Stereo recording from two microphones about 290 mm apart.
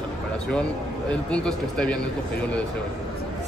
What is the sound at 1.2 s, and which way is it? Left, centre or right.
Speech, centre.